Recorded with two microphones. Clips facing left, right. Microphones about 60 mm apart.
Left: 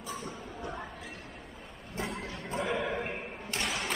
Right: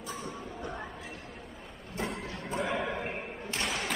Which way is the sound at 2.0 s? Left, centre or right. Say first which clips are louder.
Right 1 dB; centre.